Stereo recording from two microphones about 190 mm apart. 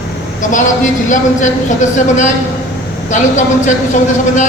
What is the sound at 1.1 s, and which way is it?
Speech, 40° left (ahead or behind).